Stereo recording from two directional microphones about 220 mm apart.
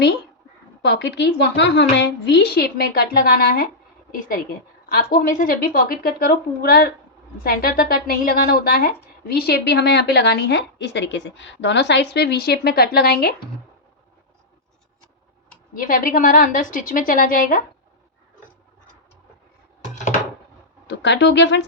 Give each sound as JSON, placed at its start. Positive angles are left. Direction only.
{"t": 0.8, "sound": "a woman's voice", "side_deg": 50}
{"t": 4.9, "sound": "a woman's voice", "side_deg": 40}
{"t": 15.7, "sound": "speech", "side_deg": 40}
{"t": 20.8, "sound": "speech", "side_deg": 50}